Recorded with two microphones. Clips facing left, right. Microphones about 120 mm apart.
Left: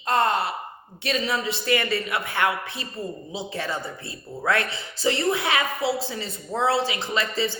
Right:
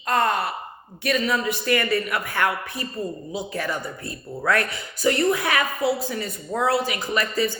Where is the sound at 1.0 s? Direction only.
25° left (ahead or behind).